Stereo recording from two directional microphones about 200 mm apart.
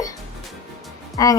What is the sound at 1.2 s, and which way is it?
Speech, 15° left (ahead or behind).